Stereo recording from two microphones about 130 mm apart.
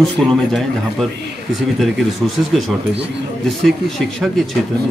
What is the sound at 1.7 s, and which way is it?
Speech, centre (ahead or behind).